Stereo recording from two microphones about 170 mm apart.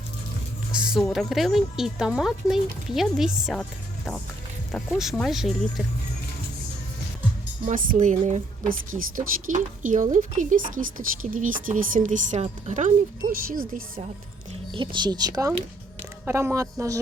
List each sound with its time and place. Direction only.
0.7 s a woman's voice: 5° right (ahead or behind)
8.0 s speech: 45° right (ahead or behind)
13.3 s speech: 55° right (ahead or behind)
14.7 s speech: 30° right (ahead or behind)